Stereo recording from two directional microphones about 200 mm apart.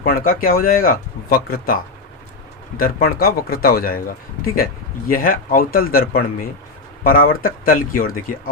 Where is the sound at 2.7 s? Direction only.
45° left (ahead or behind).